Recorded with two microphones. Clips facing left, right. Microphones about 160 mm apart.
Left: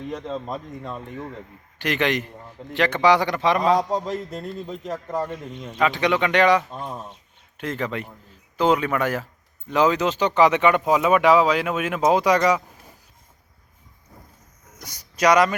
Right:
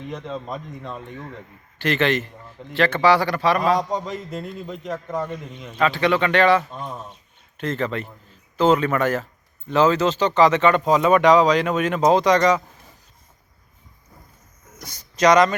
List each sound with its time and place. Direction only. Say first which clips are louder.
0.9 s a man's voice: left 1 dB; 5° left (ahead or behind); by 3.8 s 20° left (ahead or behind)
3.8 s a man's voice: left 1 dB; centre (ahead or behind)
5.8 s speech: right 1 dB; 15° left (ahead or behind)
14.7 s speech: right 2 dB; 15° left (ahead or behind)